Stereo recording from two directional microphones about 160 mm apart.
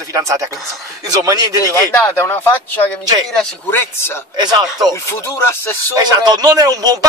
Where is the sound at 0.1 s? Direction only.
20° right (ahead or behind).